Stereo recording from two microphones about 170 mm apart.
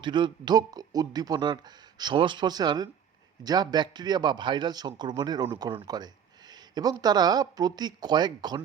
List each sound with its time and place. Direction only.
0.0 s speech: 25° right (ahead or behind)